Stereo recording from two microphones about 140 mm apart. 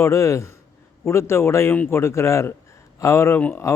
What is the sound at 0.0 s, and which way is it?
Speech, 20° left (ahead or behind).